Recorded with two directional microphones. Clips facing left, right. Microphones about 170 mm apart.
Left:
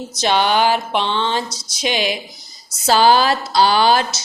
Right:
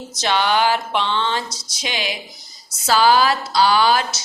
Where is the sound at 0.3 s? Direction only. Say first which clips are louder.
Left 2 dB; 20° left (ahead or behind).